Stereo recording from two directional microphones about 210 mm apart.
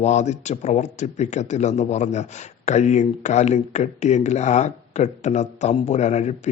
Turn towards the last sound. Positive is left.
turn(degrees=35)  # may be behind; listen again after turning